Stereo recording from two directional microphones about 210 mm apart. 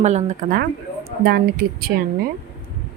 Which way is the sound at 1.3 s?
45° right (ahead or behind).